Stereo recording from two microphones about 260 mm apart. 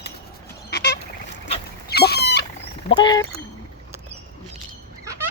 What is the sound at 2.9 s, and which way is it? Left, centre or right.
Speech, centre.